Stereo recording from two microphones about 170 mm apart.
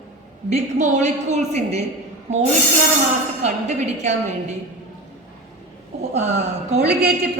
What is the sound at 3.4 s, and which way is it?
Speech, 45° right (ahead or behind).